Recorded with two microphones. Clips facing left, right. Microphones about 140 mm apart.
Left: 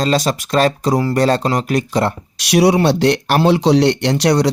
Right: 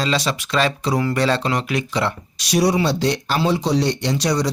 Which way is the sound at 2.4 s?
70° left (ahead or behind).